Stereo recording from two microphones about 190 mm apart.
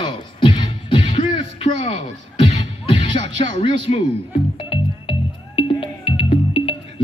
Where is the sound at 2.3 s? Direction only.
35° left (ahead or behind).